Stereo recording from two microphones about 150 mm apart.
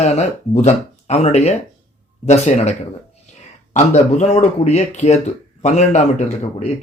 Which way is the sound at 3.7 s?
50° left (ahead or behind).